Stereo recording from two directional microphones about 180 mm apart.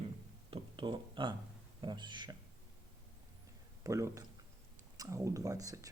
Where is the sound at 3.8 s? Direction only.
15° right (ahead or behind).